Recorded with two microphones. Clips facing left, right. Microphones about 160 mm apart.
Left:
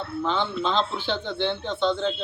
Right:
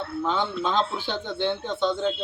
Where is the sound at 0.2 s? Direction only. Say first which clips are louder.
Even; 10° right (ahead or behind).